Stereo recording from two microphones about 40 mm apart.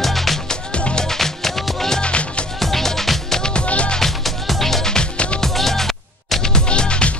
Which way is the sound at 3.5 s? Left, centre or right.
Left.